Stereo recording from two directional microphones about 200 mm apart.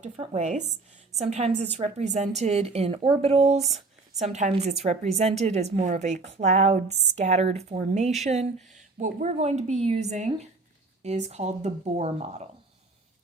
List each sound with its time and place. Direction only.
0.0 s a woman's voice: 35° right (ahead or behind)